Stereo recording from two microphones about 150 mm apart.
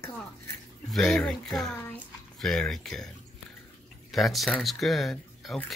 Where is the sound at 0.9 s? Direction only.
5° left (ahead or behind).